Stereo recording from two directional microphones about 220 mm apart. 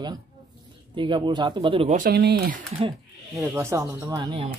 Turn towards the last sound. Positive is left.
turn(degrees=-20)  # may be behind; listen again after turning